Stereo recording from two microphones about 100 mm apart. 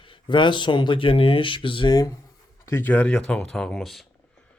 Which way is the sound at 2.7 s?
20° left (ahead or behind).